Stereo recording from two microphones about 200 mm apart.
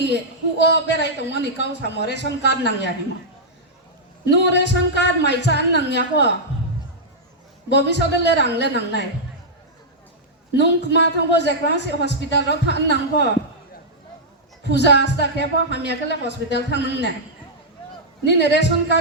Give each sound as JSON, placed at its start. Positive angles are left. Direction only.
{"t": 0.6, "sound": "a man's voice", "side_deg": 60}
{"t": 4.3, "sound": "a man's voice", "side_deg": 60}
{"t": 7.7, "sound": "a man's voice", "side_deg": 60}
{"t": 10.5, "sound": "a man's voice", "side_deg": 60}
{"t": 14.6, "sound": "a man's voice", "side_deg": 60}
{"t": 18.3, "sound": "a man's voice", "side_deg": 60}